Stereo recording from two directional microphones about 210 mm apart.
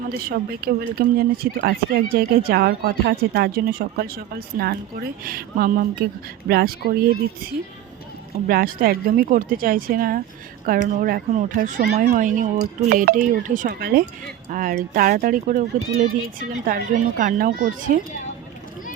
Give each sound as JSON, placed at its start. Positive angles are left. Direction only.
{"t": 0.2, "sound": "speech", "side_deg": -45}
{"t": 8.4, "sound": "speech", "side_deg": -45}